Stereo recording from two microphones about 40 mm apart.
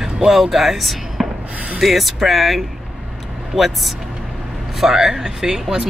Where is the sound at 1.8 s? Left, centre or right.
Centre.